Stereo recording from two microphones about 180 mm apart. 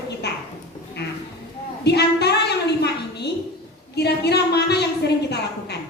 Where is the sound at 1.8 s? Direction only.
70° left (ahead or behind).